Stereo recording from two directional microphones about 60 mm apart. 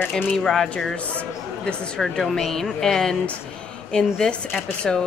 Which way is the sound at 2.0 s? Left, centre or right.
Centre.